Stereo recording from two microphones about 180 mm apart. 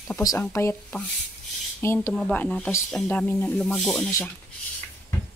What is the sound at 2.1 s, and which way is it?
Speech, 5° left (ahead or behind).